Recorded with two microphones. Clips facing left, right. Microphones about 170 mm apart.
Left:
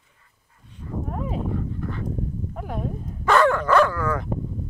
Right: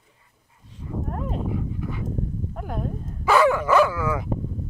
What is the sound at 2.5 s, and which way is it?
Dog, centre (ahead or behind).